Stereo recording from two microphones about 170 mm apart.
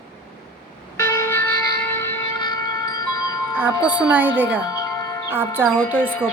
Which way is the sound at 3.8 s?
10° right (ahead or behind).